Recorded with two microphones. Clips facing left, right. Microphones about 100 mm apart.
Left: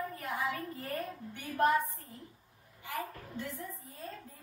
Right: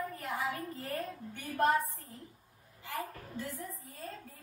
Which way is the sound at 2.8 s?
20° left (ahead or behind).